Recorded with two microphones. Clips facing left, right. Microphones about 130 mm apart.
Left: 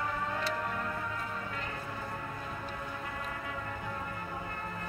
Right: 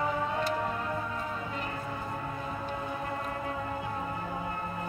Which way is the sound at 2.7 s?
30° right (ahead or behind).